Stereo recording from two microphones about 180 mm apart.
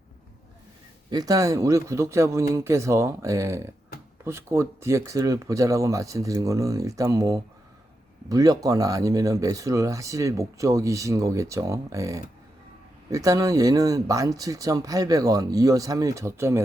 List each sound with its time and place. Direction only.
1.1 s speech: 20° right (ahead or behind)